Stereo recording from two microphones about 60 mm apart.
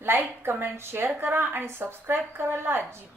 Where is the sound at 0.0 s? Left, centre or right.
Right.